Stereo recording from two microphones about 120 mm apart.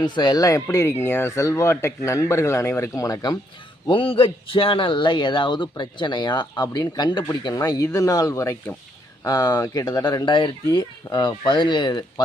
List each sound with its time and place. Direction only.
0.0 s speech: 35° left (ahead or behind)
3.8 s speech: 45° left (ahead or behind)